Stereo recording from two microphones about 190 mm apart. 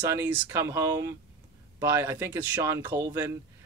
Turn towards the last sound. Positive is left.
turn(degrees=-15)  # may be behind; listen again after turning